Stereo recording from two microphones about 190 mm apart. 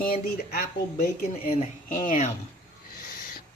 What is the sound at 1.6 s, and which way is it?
Speech, 40° left (ahead or behind).